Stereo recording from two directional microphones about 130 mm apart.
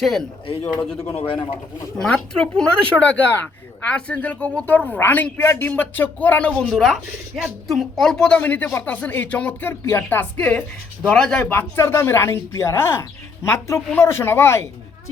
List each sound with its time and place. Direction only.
0.0 s speech: centre (ahead or behind)
0.9 s a man's voice: 15° left (ahead or behind)
11.4 s speech: 20° left (ahead or behind)